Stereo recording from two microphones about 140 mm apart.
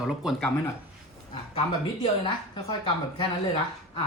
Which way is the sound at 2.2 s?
35° left (ahead or behind).